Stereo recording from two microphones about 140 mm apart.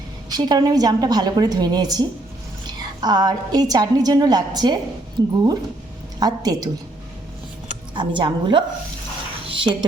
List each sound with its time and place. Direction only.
0.3 s a woman's voice: 30° right (ahead or behind)
7.9 s speech: 35° right (ahead or behind)